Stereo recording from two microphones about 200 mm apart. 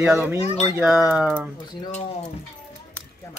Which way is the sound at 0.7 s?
5° right (ahead or behind).